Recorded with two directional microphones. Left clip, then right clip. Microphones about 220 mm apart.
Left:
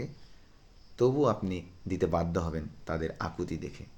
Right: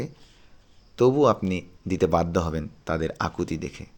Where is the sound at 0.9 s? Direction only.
35° right (ahead or behind).